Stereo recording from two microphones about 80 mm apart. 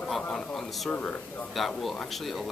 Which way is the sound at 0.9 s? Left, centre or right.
Centre.